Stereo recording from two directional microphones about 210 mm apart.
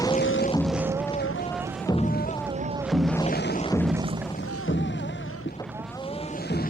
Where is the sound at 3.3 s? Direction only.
45° left (ahead or behind).